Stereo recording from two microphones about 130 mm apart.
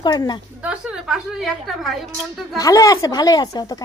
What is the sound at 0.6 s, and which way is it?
A woman's voice, 5° right (ahead or behind).